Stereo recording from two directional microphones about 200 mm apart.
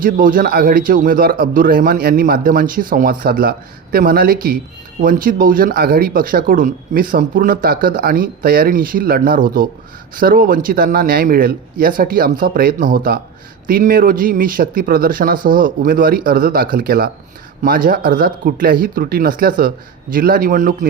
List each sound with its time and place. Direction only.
0.0 s speech: 45° right (ahead or behind)